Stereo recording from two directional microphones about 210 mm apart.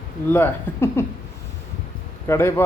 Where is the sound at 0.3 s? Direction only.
10° left (ahead or behind).